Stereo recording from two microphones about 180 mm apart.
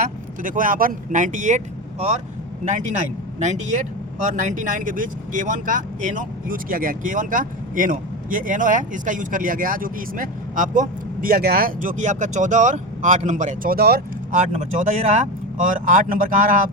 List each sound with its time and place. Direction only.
0.0 s speech: 50° right (ahead or behind)
3.7 s speech: 45° right (ahead or behind)
14.5 s speech: 45° right (ahead or behind)